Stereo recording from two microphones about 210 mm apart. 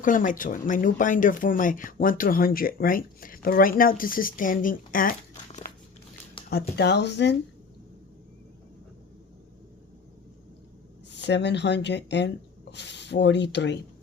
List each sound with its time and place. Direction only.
0.0 s speech: 40° left (ahead or behind)
6.5 s speech: 50° left (ahead or behind)
11.1 s speech: 55° left (ahead or behind)